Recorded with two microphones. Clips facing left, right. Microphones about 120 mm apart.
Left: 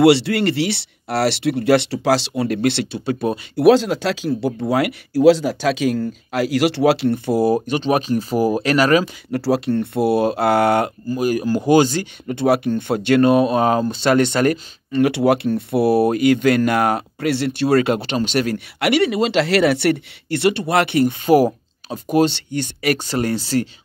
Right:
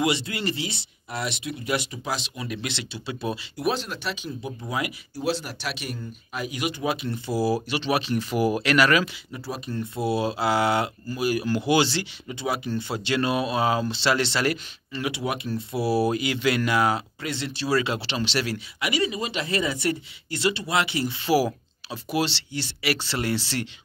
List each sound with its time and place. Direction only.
0.0 s speech: 75° left (ahead or behind); by 3.6 s 50° left (ahead or behind)
3.6 s speech: 90° left; by 7.5 s 60° left (ahead or behind)
7.6 s speech: 45° left (ahead or behind)
9.3 s speech: 80° left; by 10.9 s 55° left (ahead or behind)
11.1 s speech: 45° left (ahead or behind)
18.8 s speech: 70° left (ahead or behind); by 23.7 s 40° left (ahead or behind)